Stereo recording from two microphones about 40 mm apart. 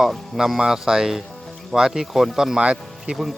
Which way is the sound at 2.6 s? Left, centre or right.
Right.